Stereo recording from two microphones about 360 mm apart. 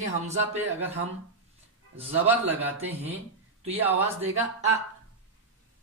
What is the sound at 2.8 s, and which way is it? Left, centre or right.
Speech, centre.